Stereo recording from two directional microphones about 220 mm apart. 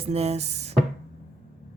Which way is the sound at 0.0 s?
30° right (ahead or behind).